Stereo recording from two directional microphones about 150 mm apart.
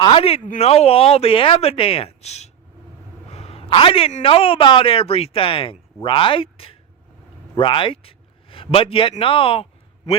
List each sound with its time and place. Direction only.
0.0 s a man's voice: 40° left (ahead or behind)